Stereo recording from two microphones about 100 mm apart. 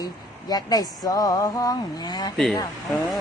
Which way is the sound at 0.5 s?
40° left (ahead or behind).